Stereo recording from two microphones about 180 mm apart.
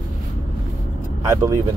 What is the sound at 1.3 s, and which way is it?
Speech, 15° right (ahead or behind).